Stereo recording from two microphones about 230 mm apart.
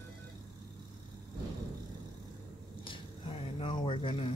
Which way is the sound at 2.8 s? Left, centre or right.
Left.